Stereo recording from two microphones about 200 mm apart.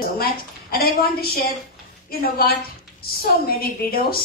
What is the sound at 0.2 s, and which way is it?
A woman's voice, 50° left (ahead or behind).